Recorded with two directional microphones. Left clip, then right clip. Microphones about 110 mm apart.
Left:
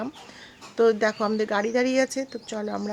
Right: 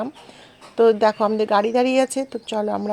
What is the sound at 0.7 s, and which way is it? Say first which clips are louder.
Speech: right 5 dB; 15° right (ahead or behind).